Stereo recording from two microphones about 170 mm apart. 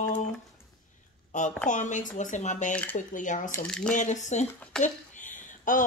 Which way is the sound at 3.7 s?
5° left (ahead or behind).